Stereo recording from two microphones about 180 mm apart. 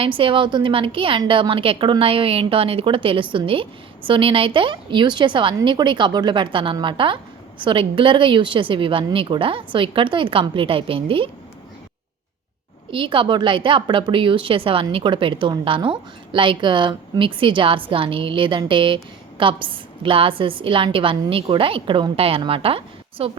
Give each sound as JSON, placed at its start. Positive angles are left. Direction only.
{"t": 0.0, "sound": "a woman's voice", "side_deg": -30}
{"t": 12.9, "sound": "a woman's voice", "side_deg": -30}